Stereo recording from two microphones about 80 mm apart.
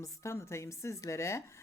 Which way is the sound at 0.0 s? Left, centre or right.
Left.